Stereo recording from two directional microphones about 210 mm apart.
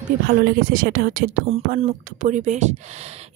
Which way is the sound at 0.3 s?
45° right (ahead or behind).